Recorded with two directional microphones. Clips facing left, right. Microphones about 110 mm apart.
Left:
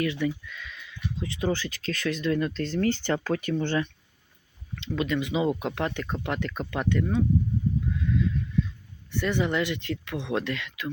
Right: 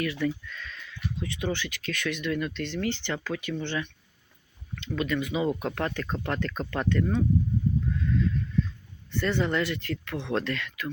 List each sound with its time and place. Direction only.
0.0 s speech: 25° left (ahead or behind)
0.3 s speech: 10° left (ahead or behind)
1.2 s speech: 30° left (ahead or behind)
4.9 s speech: 25° left (ahead or behind); by 7.3 s 10° left (ahead or behind)
9.0 s speech: 15° left (ahead or behind)